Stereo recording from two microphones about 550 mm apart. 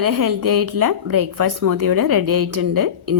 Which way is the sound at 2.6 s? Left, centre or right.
Right.